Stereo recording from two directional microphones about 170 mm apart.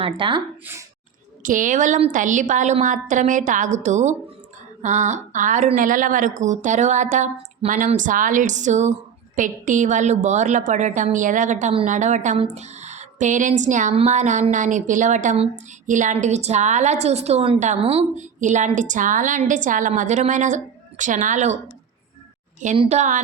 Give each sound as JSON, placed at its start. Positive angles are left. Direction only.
{"t": 0.0, "sound": "speech", "side_deg": -30}
{"t": 1.4, "sound": "speech", "side_deg": -50}
{"t": 22.8, "sound": "speech", "side_deg": -40}